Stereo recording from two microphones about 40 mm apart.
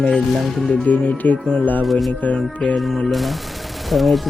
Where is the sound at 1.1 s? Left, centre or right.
Left.